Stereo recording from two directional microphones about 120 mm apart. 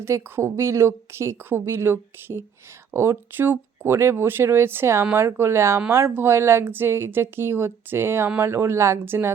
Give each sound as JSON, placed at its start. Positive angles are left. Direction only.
{"t": 0.0, "sound": "a woman's voice", "side_deg": -20}